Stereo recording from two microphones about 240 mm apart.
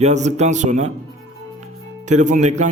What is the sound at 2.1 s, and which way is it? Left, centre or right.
Speech, right.